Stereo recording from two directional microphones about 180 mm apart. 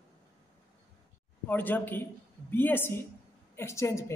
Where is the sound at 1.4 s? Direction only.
10° left (ahead or behind).